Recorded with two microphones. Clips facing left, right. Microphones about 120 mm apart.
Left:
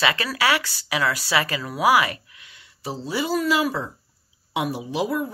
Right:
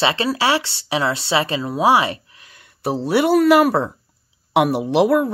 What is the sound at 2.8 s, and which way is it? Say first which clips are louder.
Speech: right 9 dB; 65° right (ahead or behind).